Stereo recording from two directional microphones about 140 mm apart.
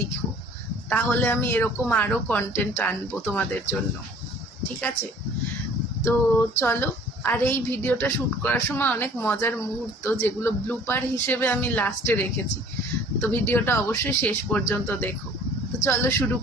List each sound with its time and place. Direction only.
0.9 s a woman's voice: 15° left (ahead or behind)
6.6 s a woman's voice: 15° left (ahead or behind)